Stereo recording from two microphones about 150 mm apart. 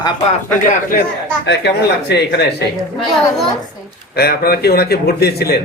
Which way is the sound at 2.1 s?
90° left.